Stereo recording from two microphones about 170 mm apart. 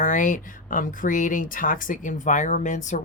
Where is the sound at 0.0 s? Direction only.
50° left (ahead or behind).